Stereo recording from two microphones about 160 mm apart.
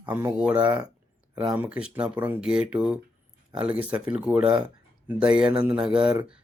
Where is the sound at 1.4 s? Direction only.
10° right (ahead or behind).